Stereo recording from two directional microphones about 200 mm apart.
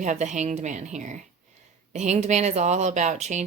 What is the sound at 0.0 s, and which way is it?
Speech, 35° right (ahead or behind).